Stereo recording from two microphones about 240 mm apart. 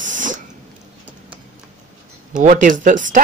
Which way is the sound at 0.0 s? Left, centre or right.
Right.